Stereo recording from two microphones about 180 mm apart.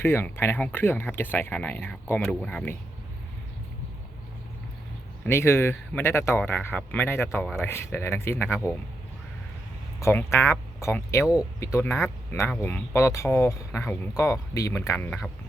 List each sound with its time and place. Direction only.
0.0 s speech: 15° left (ahead or behind)
5.2 s speech: 15° left (ahead or behind)
10.0 s speech: 15° left (ahead or behind)